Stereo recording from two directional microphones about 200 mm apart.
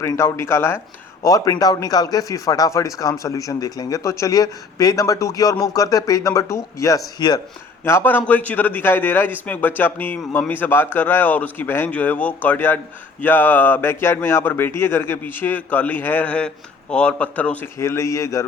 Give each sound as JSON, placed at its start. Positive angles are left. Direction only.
{"t": 0.0, "sound": "speech", "side_deg": 15}